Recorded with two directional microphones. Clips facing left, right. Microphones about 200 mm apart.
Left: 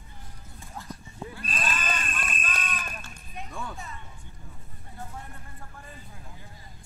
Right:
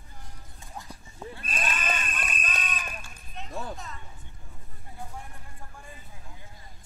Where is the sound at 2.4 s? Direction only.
20° right (ahead or behind).